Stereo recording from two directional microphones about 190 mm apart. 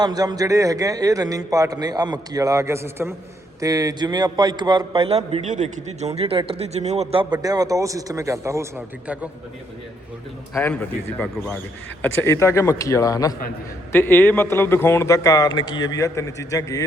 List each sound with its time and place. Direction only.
0.0 s a man's voice: 20° right (ahead or behind)
10.5 s a man's voice: 10° left (ahead or behind)